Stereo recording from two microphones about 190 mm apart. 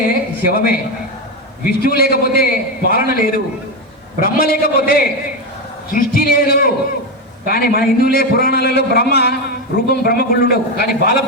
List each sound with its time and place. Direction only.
0.4 s a man's voice: 50° left (ahead or behind)
1.8 s a man's voice: 50° left (ahead or behind)